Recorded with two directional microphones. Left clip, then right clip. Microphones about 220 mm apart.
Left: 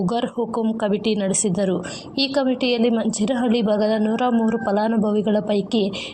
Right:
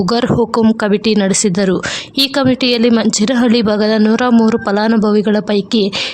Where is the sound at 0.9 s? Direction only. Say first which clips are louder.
Right 8 dB; 50° right (ahead or behind).